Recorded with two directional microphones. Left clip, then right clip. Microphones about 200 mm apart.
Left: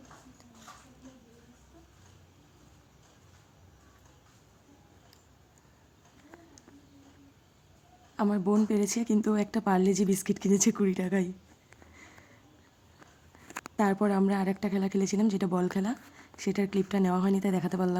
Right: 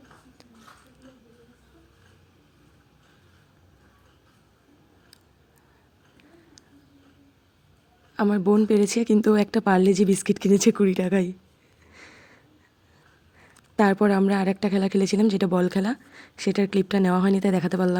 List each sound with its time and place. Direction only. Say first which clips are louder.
8.1 s a woman's voice: right 7 dB; 20° right (ahead or behind)
11.9 s a sound: right 7 dB; 25° right (ahead or behind)
13.7 s a woman's voice: right 7 dB; 25° right (ahead or behind)